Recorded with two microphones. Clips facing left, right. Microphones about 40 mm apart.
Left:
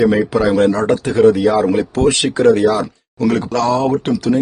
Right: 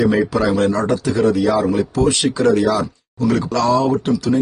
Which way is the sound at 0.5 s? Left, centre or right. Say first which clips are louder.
Left 3 dB; left.